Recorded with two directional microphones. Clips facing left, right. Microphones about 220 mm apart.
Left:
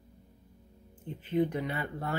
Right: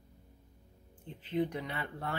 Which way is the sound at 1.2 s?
50° left (ahead or behind).